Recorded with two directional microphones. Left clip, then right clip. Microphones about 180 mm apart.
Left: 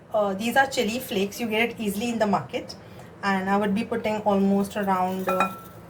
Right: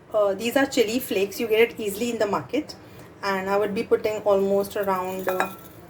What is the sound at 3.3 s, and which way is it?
A woman's voice, 40° right (ahead or behind).